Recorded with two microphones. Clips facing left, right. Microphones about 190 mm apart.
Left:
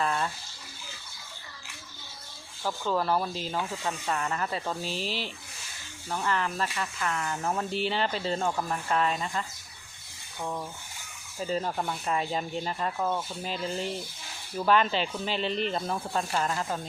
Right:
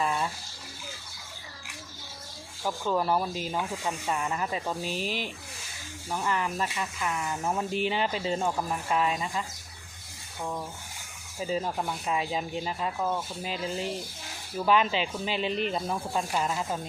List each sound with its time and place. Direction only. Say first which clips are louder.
0.0 s bathtub: even; 10° right (ahead or behind)
2.6 s speech: right 1 dB; 10° right (ahead or behind)
5.0 s speech: right 1 dB; 45° right (ahead or behind)
6.1 s speech: even; 10° right (ahead or behind)
11.3 s speech: even; 5° right (ahead or behind)